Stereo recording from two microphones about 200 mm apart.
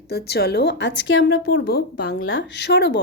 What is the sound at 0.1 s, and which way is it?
A woman's voice, 55° left (ahead or behind).